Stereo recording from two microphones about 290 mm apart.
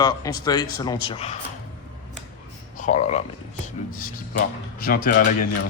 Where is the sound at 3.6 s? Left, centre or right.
Left.